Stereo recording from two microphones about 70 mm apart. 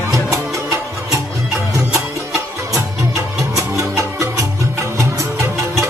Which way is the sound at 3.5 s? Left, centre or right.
Right.